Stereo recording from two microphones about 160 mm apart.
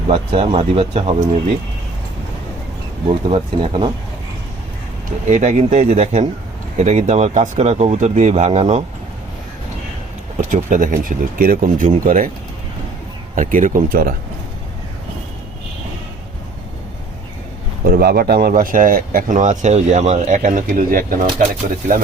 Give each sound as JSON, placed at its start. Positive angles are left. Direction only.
{"t": 0.1, "sound": "speech", "side_deg": -35}
{"t": 3.1, "sound": "speech", "side_deg": -35}
{"t": 5.0, "sound": "speech", "side_deg": -50}
{"t": 10.5, "sound": "speech", "side_deg": -55}
{"t": 13.3, "sound": "speech", "side_deg": -55}
{"t": 17.8, "sound": "speech", "side_deg": -70}